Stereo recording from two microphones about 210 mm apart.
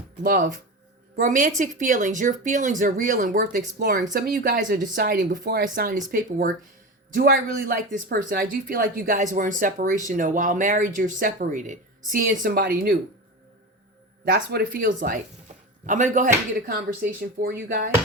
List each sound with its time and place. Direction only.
0.2 s speech: 40° right (ahead or behind)
3.8 s speech: 50° right (ahead or behind)
14.3 s speech: 45° right (ahead or behind)